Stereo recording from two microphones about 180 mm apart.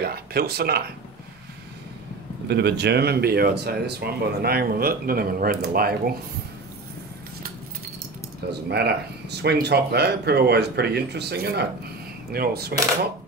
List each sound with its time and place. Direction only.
0.0 s speech: 60° right (ahead or behind)
2.4 s speech: 65° right (ahead or behind)
8.5 s speech: 65° right (ahead or behind)